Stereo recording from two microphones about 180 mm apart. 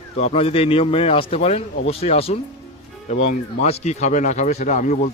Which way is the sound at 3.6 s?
40° left (ahead or behind).